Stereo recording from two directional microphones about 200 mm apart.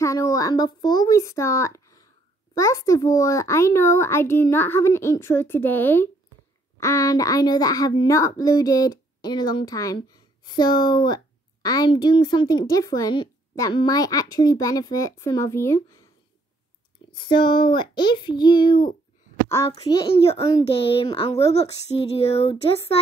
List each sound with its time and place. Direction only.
0.0 s a child's voice: 15° left (ahead or behind)
17.1 s a child's voice: 25° left (ahead or behind)
20.6 s speech: 30° left (ahead or behind)